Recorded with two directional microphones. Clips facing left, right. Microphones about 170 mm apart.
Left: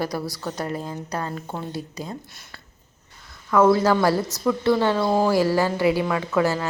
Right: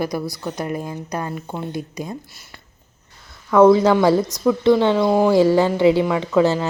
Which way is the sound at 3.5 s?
15° right (ahead or behind).